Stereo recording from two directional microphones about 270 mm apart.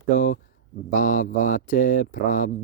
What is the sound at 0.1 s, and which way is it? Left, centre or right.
Speech, left.